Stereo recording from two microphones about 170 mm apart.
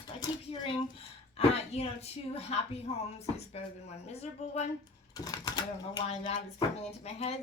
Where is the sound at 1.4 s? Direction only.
35° left (ahead or behind).